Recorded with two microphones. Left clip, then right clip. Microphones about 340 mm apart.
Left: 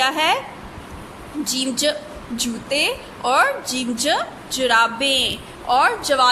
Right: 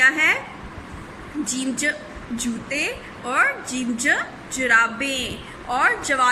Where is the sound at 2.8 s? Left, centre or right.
Centre.